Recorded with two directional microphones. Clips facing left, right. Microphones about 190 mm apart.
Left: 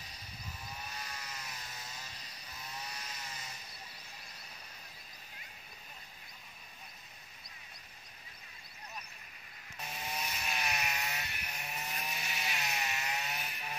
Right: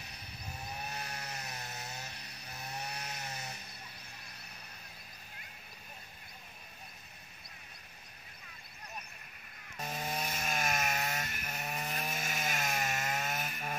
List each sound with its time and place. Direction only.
0.7 s chainsaw: 60° right (ahead or behind)
9.8 s chainsaw: 45° right (ahead or behind)